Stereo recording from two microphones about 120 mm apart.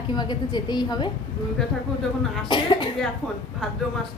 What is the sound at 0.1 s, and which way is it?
A woman's voice, 35° left (ahead or behind).